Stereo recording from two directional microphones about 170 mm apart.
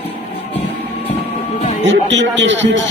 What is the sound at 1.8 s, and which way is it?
Speech, 90° right.